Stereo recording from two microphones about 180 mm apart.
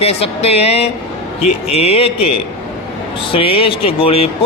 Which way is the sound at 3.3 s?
30° left (ahead or behind).